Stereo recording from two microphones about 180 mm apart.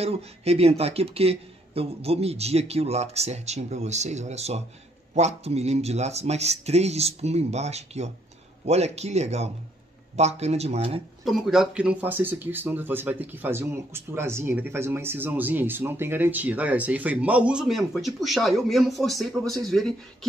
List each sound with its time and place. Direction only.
0.0 s speech: 35° right (ahead or behind)
11.2 s speech: centre (ahead or behind)